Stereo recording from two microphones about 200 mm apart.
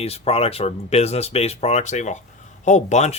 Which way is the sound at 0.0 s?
30° left (ahead or behind).